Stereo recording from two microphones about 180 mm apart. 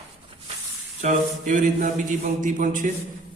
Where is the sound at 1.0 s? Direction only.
45° right (ahead or behind).